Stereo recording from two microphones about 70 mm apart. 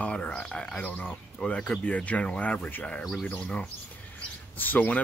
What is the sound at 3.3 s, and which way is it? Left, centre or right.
Speech, centre.